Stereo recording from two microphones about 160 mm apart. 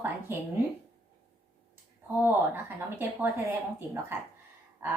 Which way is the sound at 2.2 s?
15° right (ahead or behind).